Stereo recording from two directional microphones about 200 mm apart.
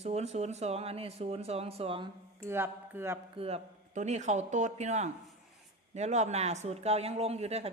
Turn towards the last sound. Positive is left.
turn(degrees=-30)  # may be behind; listen again after turning